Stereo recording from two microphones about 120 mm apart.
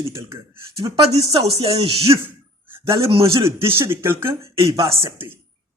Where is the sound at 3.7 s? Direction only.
20° right (ahead or behind).